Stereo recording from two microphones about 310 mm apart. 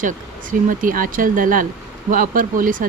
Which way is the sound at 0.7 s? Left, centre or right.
Right.